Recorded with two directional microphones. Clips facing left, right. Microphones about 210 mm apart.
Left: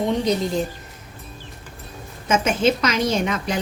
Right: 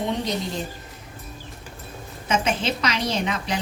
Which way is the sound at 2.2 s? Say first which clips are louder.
Left 5 dB; 45° left (ahead or behind).